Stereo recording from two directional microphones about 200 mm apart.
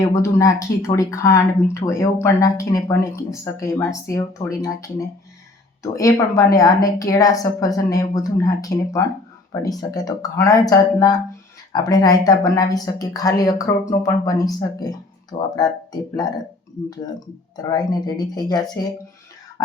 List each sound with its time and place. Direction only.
0.2 s speech: 15° left (ahead or behind)
17.6 s speech: 20° left (ahead or behind)